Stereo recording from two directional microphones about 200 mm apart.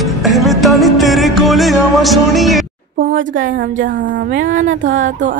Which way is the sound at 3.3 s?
40° right (ahead or behind).